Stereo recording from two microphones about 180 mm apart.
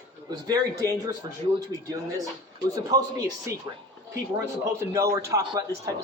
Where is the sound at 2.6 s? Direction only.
20° right (ahead or behind).